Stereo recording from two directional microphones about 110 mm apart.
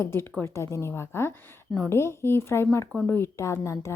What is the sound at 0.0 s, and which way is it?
A woman's voice, 20° left (ahead or behind).